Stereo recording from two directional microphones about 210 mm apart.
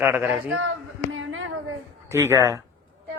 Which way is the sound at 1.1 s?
70° right (ahead or behind).